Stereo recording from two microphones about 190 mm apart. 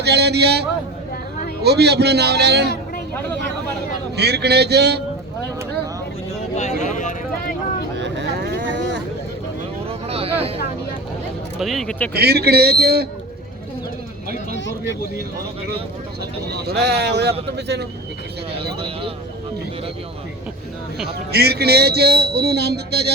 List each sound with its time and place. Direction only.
0.0 s speech: 60° right (ahead or behind)
1.6 s speech: 60° right (ahead or behind)
4.2 s speech: 60° right (ahead or behind)
6.6 s vehicle: 40° left (ahead or behind)
7.9 s vehicle: 65° right (ahead or behind)
10.1 s a sound: 30° right (ahead or behind)
11.6 s speech: centre (ahead or behind)
12.1 s speech: 55° right (ahead or behind)
16.5 s speech: 60° right (ahead or behind)
21.0 s speech: 55° right (ahead or behind)